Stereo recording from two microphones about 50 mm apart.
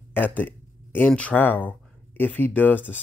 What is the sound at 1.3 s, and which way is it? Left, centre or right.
Speech, left.